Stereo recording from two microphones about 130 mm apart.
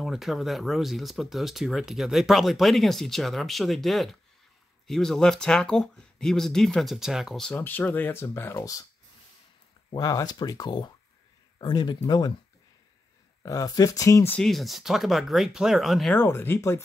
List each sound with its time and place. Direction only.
0.0 s speech: centre (ahead or behind)
7.5 s speech: 15° left (ahead or behind)
9.8 s speech: 30° left (ahead or behind)
13.4 s speech: 25° left (ahead or behind)
14.3 s speech: centre (ahead or behind)
16.2 s speech: 15° left (ahead or behind)